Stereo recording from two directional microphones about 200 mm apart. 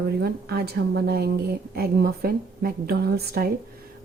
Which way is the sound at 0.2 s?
50° right (ahead or behind).